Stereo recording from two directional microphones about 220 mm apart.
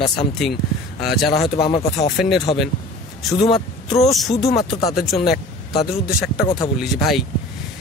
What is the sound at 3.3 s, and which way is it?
Speech, 25° left (ahead or behind).